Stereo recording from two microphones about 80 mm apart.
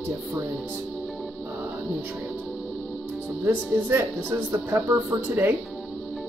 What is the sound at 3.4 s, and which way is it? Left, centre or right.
Speech, right.